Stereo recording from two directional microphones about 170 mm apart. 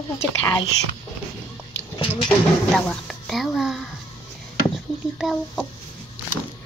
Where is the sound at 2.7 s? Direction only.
5° left (ahead or behind).